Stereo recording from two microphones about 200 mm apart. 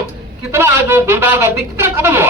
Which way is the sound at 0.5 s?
10° right (ahead or behind).